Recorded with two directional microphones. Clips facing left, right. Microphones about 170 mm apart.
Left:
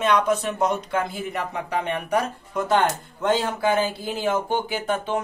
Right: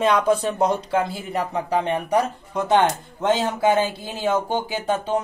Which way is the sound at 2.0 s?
15° right (ahead or behind).